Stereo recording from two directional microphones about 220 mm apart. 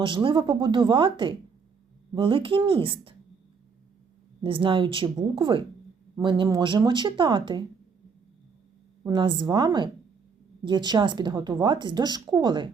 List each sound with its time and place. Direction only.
0.0 s speech: 20° right (ahead or behind)
4.4 s speech: 25° right (ahead or behind)
9.0 s speech: 20° right (ahead or behind)